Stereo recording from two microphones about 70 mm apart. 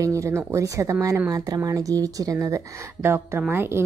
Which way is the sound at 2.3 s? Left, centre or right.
Right.